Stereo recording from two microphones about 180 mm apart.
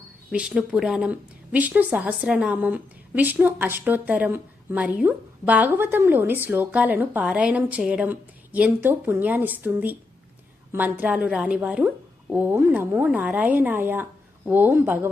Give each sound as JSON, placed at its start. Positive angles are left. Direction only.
{"t": 0.3, "sound": "a woman's voice", "side_deg": -5}